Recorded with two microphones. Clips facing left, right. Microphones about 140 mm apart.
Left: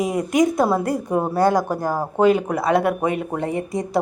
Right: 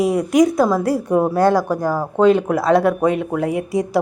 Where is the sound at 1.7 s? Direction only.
25° left (ahead or behind).